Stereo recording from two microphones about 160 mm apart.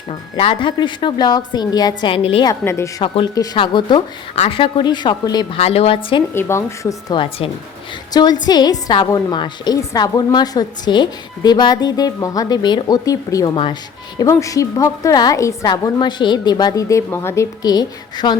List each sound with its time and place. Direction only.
0.1 s a woman's voice: 35° left (ahead or behind)
2.5 s a woman's voice: 15° left (ahead or behind)
5.5 s a woman's voice: 40° left (ahead or behind)
6.3 s speech: 15° left (ahead or behind)
7.1 s a woman's voice: 35° left (ahead or behind)